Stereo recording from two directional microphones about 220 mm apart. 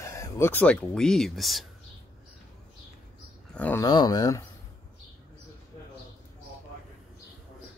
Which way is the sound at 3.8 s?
20° left (ahead or behind).